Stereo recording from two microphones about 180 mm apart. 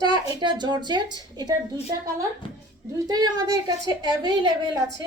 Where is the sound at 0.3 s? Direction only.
25° right (ahead or behind).